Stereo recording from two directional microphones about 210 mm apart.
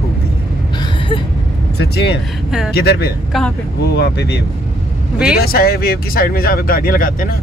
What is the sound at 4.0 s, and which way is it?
Speech, 50° left (ahead or behind).